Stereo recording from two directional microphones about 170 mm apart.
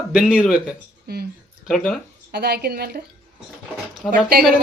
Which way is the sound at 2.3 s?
70° right (ahead or behind).